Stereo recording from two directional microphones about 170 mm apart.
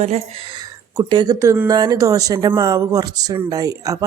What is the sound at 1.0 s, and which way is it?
Speech, 25° right (ahead or behind).